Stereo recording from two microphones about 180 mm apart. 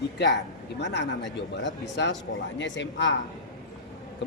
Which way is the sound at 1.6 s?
85° left.